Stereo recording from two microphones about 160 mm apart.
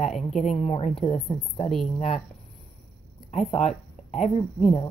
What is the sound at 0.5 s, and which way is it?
Speech, 40° left (ahead or behind).